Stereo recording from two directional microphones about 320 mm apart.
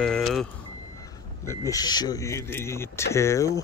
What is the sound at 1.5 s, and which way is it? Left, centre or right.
Speech, centre.